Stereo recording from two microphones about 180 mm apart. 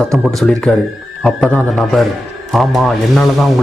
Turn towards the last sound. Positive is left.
turn(degrees=0)  # may be behind; listen again after turning